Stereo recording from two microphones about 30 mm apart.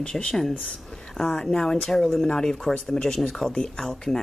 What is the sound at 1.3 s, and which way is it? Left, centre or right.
Speech, left.